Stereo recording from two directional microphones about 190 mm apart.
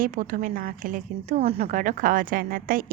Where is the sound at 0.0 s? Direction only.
45° right (ahead or behind).